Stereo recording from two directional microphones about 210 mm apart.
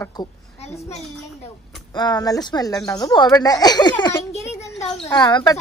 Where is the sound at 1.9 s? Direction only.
20° left (ahead or behind).